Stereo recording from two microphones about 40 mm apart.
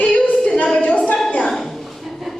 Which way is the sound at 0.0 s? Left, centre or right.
Left.